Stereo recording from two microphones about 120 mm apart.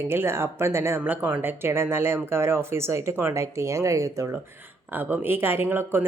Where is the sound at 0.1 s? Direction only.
20° right (ahead or behind).